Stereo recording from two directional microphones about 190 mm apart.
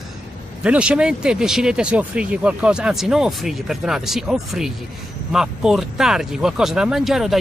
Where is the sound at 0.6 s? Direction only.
5° right (ahead or behind).